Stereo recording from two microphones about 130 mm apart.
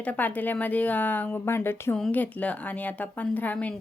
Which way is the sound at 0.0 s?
10° left (ahead or behind).